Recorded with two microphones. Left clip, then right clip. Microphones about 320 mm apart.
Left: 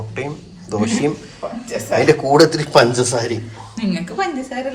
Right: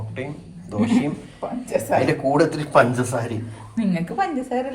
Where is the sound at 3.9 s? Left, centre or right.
Right.